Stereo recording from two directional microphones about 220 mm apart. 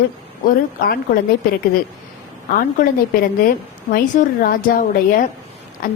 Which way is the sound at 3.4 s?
40° left (ahead or behind).